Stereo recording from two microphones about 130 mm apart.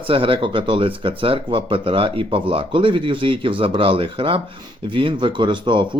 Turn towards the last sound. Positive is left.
turn(degrees=-40)  # may be behind; listen again after turning